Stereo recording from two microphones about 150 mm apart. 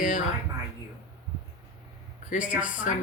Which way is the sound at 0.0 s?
55° left (ahead or behind).